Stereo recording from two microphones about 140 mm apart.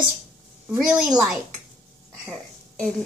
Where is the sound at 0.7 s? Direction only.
5° right (ahead or behind).